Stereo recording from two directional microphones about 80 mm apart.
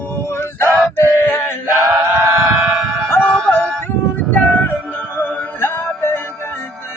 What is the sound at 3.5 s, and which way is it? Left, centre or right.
Music, left.